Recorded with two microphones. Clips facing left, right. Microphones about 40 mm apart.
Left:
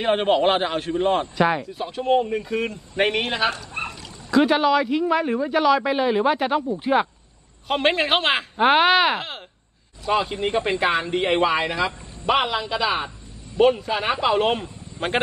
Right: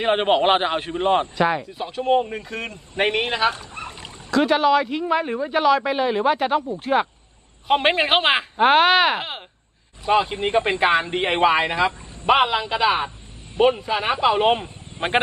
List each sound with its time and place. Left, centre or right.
0.0 s speech: right
1.4 s speech: centre
2.0 s speech: centre
2.5 s speech: centre
3.8 s a sound: left
4.4 s speech: centre
7.6 s speech: centre
10.0 s speech: centre
13.8 s speech: centre
14.6 s a sound: right